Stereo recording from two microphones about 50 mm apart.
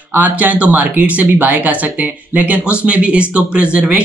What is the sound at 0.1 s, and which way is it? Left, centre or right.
Speech, right.